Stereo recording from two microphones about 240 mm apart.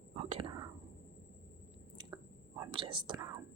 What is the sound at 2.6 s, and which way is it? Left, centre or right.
Speech, right.